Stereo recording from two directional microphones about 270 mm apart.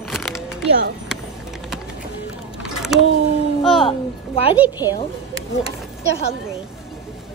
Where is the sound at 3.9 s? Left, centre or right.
Left.